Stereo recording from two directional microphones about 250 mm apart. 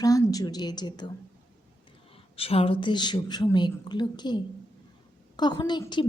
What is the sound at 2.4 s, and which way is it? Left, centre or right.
A woman's voice, left.